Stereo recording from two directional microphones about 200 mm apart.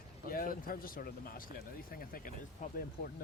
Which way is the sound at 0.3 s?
45° left (ahead or behind).